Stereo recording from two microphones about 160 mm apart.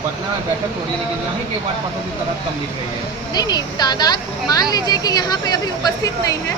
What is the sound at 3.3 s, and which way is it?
A woman's voice, 25° left (ahead or behind).